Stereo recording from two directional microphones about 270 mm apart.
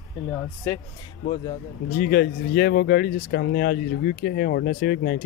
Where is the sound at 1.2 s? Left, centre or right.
Left.